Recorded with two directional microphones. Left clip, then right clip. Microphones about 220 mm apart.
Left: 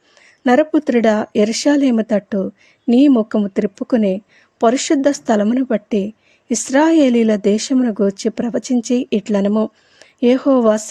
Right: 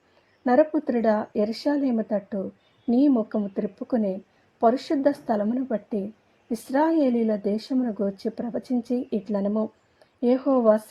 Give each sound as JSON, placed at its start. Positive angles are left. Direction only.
{"t": 0.4, "sound": "speech", "side_deg": 30}